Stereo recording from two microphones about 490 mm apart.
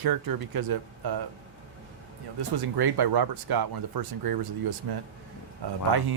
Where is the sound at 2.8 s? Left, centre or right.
Right.